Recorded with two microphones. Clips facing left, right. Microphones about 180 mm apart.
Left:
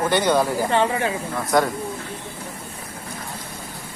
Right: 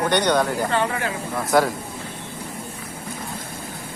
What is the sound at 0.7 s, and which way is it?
Speech, 20° left (ahead or behind).